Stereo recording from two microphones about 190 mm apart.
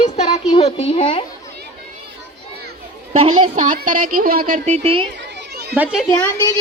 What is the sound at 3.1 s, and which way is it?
A woman's voice, 35° right (ahead or behind).